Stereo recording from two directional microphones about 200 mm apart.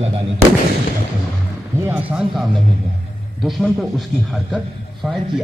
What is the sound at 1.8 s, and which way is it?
A man's voice, 10° right (ahead or behind).